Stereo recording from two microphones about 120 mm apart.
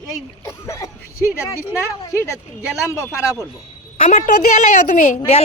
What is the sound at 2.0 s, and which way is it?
Speech, 25° left (ahead or behind).